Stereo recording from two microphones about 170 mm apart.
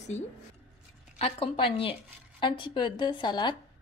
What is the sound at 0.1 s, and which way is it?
A woman's voice, 40° left (ahead or behind).